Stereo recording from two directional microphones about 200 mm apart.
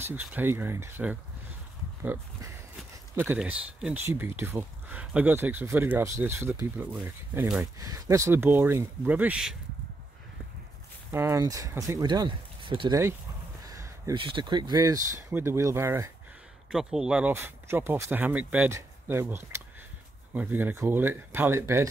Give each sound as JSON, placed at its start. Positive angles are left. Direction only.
{"t": 0.0, "sound": "speech", "side_deg": -10}
{"t": 3.2, "sound": "speech", "side_deg": -10}
{"t": 11.1, "sound": "speech", "side_deg": -10}